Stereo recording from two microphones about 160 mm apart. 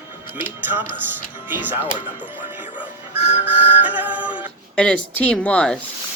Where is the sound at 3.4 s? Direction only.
10° right (ahead or behind).